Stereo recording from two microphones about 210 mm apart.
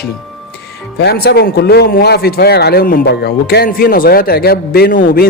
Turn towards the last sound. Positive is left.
turn(degrees=45)  # may be behind; listen again after turning